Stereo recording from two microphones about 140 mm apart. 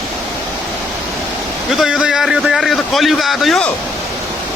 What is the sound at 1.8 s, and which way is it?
A man's voice, 5° right (ahead or behind).